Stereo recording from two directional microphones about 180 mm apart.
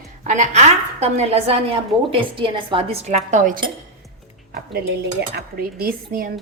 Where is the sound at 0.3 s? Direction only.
45° right (ahead or behind).